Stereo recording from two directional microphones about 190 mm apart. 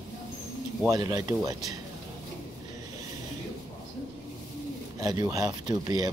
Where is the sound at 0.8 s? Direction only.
20° right (ahead or behind).